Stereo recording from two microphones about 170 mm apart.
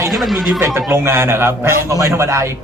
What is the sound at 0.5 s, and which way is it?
A man's voice, 15° right (ahead or behind).